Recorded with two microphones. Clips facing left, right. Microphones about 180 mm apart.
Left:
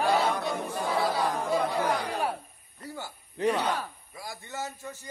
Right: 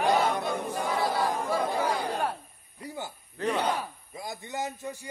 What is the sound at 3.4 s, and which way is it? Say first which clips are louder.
Speech: left 3 dB; 20° left (ahead or behind).